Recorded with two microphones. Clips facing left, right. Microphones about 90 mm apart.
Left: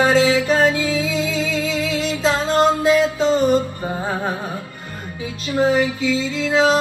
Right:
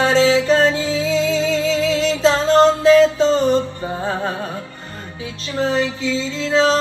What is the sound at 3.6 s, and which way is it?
Music, 10° left (ahead or behind).